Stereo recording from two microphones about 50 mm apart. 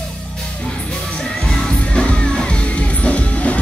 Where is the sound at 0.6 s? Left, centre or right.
Centre.